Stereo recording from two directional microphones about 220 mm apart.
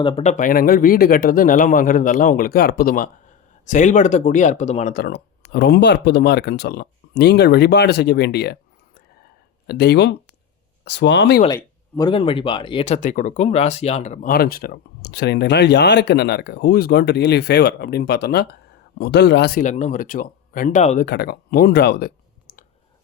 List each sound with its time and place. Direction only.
0.0 s speech: 25° left (ahead or behind); by 8.5 s 50° left (ahead or behind)
9.6 s speech: 50° left (ahead or behind)
11.4 s speech: 15° left (ahead or behind)
21.0 s speech: 45° left (ahead or behind)